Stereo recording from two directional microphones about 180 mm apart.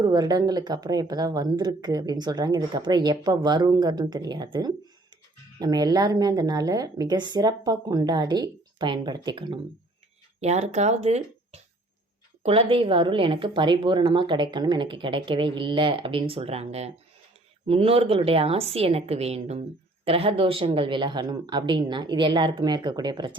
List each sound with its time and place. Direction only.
0.0 s speech: 20° right (ahead or behind)
10.4 s a woman's voice: 35° right (ahead or behind)